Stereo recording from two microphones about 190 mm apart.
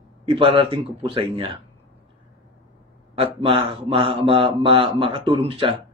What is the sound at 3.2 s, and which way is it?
Speech, 30° right (ahead or behind).